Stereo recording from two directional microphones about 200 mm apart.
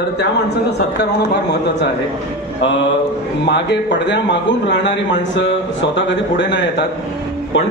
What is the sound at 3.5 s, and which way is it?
A man's voice, 60° left (ahead or behind).